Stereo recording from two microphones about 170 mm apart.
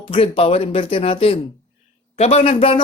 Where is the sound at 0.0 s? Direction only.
30° left (ahead or behind).